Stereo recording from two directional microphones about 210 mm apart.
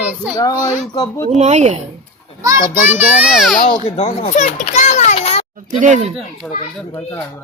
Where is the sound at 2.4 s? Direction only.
10° right (ahead or behind).